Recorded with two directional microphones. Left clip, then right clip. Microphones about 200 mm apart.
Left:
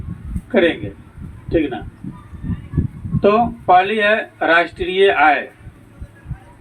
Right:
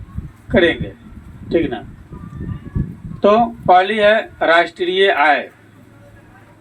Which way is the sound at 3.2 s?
40° right (ahead or behind).